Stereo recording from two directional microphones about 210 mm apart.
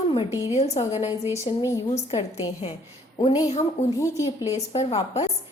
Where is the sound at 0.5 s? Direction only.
30° left (ahead or behind).